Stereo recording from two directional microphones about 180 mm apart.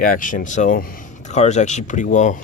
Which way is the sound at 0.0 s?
50° left (ahead or behind).